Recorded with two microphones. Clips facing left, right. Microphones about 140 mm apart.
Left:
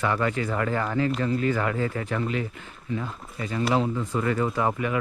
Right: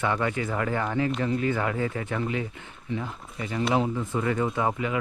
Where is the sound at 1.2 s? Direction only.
25° right (ahead or behind).